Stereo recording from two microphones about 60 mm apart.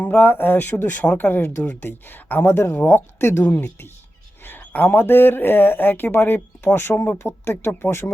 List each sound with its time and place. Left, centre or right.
0.0 s speech: left